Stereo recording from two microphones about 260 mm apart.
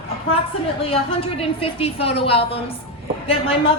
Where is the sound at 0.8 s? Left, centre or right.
Left.